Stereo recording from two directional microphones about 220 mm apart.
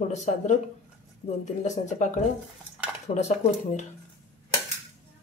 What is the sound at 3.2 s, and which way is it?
Speech, 30° left (ahead or behind).